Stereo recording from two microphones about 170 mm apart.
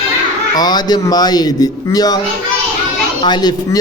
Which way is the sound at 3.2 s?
25° left (ahead or behind).